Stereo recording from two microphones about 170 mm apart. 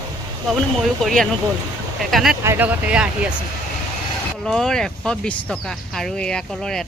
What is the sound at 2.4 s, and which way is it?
Speech, 15° right (ahead or behind).